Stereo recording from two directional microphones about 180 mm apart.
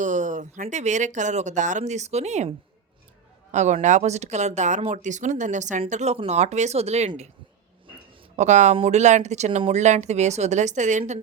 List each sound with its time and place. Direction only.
0.0 s speech: 45° right (ahead or behind)
8.4 s speech: 40° right (ahead or behind)